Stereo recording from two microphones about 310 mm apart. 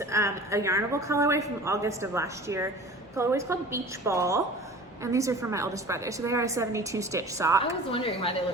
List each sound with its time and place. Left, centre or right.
0.0 s a woman's voice: centre
7.9 s a woman's voice: centre